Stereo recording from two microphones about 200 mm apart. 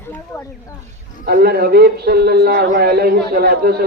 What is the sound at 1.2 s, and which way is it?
A man's voice, 50° right (ahead or behind).